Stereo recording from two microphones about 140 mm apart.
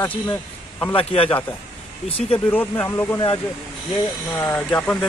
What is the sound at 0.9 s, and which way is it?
Speech, 45° left (ahead or behind).